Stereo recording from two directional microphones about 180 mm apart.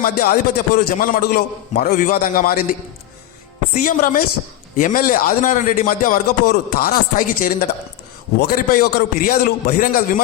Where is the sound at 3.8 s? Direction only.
50° left (ahead or behind).